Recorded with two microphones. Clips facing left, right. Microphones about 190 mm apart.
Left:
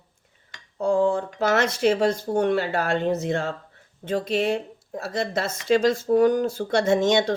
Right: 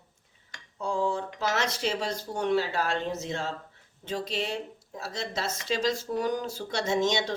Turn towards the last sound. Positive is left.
turn(degrees=55)  # may be behind; listen again after turning